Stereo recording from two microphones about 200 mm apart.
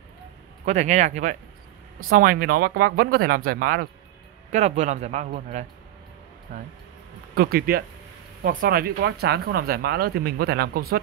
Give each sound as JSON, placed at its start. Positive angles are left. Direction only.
{"t": 0.7, "sound": "speech", "side_deg": -35}
{"t": 4.5, "sound": "speech", "side_deg": -35}
{"t": 7.3, "sound": "speech", "side_deg": -50}